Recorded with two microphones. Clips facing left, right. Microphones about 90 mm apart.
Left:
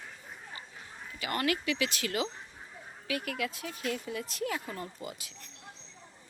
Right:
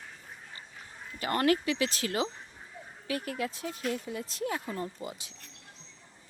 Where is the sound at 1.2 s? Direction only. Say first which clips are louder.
Right 5 dB; 35° right (ahead or behind).